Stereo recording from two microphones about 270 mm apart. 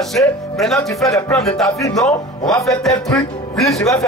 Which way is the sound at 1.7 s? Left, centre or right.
Centre.